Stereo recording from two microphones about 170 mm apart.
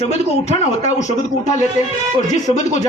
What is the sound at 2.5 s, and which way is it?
Speech, 45° left (ahead or behind).